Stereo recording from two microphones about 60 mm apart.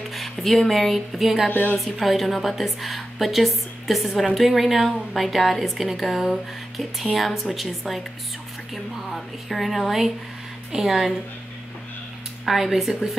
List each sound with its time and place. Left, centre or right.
0.1 s speech: centre
1.5 s speech: left
1.8 s a woman's voice: centre
12.4 s a woman's voice: centre